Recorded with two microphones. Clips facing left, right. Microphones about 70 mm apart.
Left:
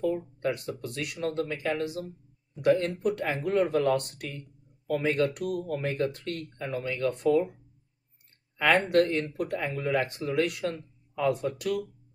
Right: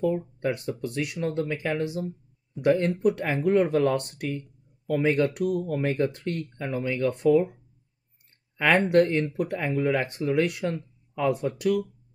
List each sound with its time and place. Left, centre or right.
0.0 s speech: centre
8.6 s speech: centre